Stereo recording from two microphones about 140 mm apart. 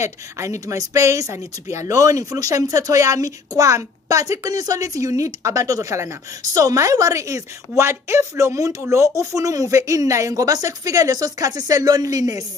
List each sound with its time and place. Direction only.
0.0 s speech: 20° right (ahead or behind)